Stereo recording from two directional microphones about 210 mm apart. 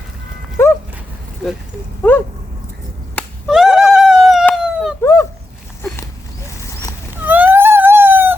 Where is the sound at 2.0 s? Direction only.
10° left (ahead or behind).